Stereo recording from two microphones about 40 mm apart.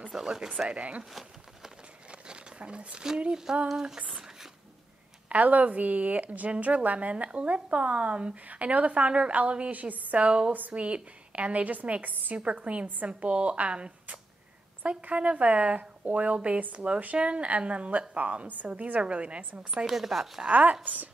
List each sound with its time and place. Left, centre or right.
0.1 s speech: centre
0.7 s a woman's voice: right
2.0 s a sound: right
3.7 s speech: centre
5.3 s a woman's voice: right
12.4 s a woman's voice: right
14.8 s a woman's voice: right
19.9 s speech: centre
20.4 s a woman's voice: right